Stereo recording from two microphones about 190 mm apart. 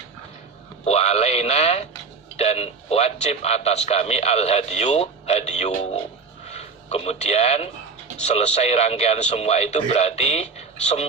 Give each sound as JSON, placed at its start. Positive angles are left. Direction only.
{"t": 0.9, "sound": "a man's voice", "side_deg": 35}